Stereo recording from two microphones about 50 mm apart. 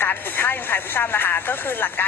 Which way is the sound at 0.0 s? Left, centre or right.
Left.